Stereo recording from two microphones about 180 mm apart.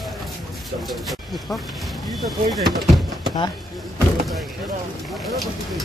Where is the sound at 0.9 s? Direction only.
Centre (ahead or behind).